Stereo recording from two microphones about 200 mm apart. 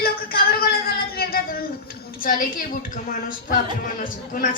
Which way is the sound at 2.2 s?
45° left (ahead or behind).